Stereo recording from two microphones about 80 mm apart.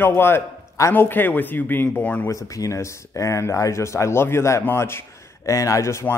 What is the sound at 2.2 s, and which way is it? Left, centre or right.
Speech, left.